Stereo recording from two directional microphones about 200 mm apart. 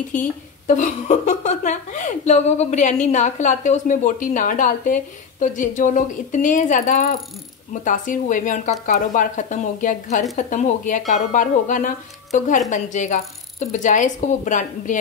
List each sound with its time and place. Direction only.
0.1 s a woman's voice: 40° left (ahead or behind)